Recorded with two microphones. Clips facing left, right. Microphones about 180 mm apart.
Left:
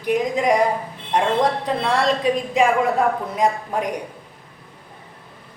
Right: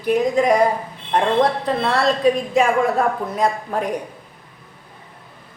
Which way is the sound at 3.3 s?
15° left (ahead or behind).